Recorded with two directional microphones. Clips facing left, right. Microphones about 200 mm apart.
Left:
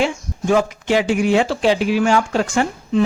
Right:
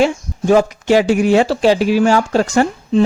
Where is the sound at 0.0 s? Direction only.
40° right (ahead or behind).